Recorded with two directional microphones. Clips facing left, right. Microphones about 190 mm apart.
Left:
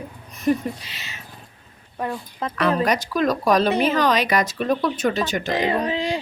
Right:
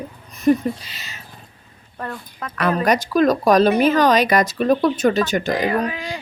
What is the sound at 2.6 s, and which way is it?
Speech, 45° right (ahead or behind).